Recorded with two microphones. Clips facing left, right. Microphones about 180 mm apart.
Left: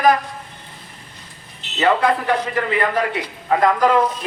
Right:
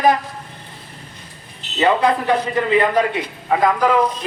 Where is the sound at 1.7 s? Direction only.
15° right (ahead or behind).